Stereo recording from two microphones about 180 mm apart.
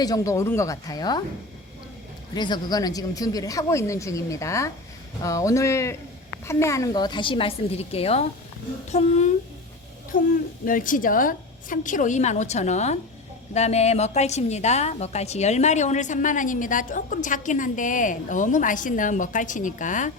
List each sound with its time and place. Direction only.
0.0 s a woman's voice: 20° left (ahead or behind)
2.3 s a woman's voice: 25° left (ahead or behind); by 9.3 s 40° left (ahead or behind)
10.1 s a woman's voice: 50° left (ahead or behind)